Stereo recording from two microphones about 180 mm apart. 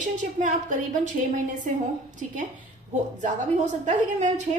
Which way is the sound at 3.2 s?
40° right (ahead or behind).